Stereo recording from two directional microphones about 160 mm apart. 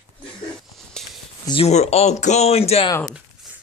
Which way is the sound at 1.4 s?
40° left (ahead or behind).